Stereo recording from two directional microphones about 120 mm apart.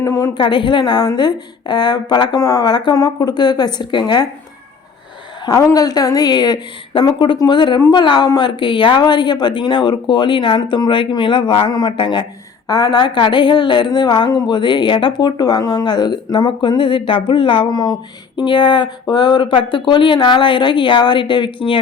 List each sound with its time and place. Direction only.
0.0 s a sound: 25° left (ahead or behind)
0.3 s a woman's voice: 40° left (ahead or behind)
5.5 s a woman's voice: 30° left (ahead or behind)